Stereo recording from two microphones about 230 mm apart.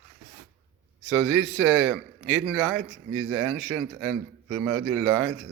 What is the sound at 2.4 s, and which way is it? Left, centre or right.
A man's voice, centre.